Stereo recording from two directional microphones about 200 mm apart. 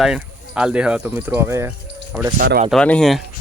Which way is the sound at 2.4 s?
55° right (ahead or behind).